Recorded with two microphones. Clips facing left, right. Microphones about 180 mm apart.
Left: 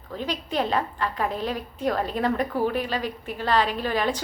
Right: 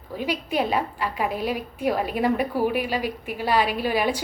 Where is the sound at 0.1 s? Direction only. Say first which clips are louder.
Right 3 dB; 10° right (ahead or behind).